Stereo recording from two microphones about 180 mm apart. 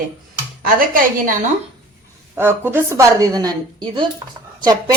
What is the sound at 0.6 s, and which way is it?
Speech, 50° right (ahead or behind).